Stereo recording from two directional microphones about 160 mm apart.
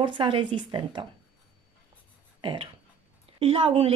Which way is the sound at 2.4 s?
35° right (ahead or behind).